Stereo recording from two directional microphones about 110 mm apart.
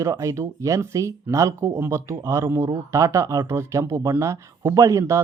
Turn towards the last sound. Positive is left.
turn(degrees=-25)  # may be behind; listen again after turning